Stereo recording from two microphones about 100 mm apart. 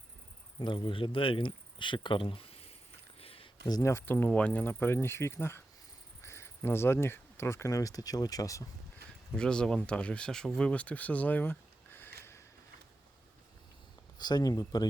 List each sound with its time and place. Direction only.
0.6 s speech: 50° left (ahead or behind); by 2.7 s 75° left (ahead or behind)
3.2 s a sound: 70° left (ahead or behind)
3.8 s speech: 25° left (ahead or behind)
9.3 s speech: 10° left (ahead or behind)
14.2 s speech: 45° left (ahead or behind)